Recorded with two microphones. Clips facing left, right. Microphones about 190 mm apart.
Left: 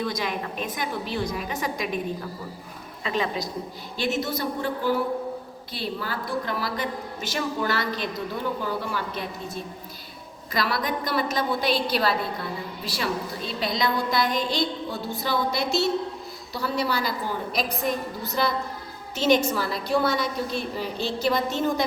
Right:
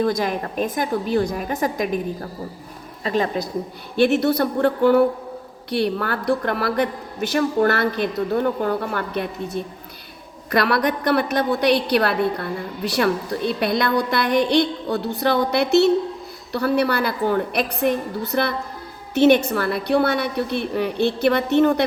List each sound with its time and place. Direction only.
0.0 s a woman's voice: 45° right (ahead or behind)
3.0 s a woman's voice: 45° right (ahead or behind)
3.9 s a woman's voice: 65° right (ahead or behind)